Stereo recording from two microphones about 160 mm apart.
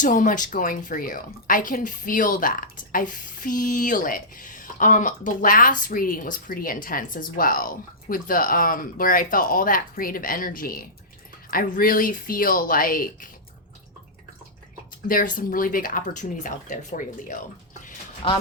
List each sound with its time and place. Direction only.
0.0 s a woman's voice: 55° left (ahead or behind)
15.0 s a woman's voice: 60° left (ahead or behind)
18.2 s speech: 35° left (ahead or behind)